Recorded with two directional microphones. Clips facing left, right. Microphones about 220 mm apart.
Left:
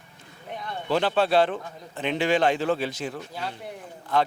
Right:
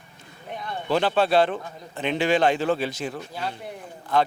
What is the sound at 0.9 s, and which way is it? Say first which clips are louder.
Speech: right 1 dB; 10° right (ahead or behind).